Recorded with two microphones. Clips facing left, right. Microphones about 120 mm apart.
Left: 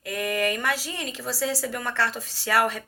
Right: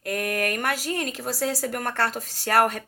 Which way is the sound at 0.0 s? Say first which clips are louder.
Even; 50° right (ahead or behind).